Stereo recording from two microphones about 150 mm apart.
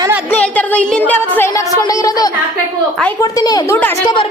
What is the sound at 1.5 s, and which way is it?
A woman's voice, 20° left (ahead or behind).